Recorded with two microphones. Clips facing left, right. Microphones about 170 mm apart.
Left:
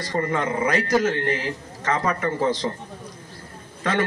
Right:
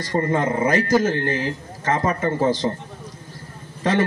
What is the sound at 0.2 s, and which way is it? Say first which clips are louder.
Speech: right 2 dB; 25° right (ahead or behind).